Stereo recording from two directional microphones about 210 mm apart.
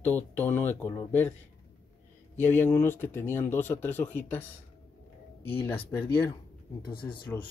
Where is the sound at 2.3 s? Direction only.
10° left (ahead or behind).